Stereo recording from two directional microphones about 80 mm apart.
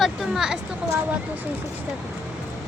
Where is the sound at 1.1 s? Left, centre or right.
Right.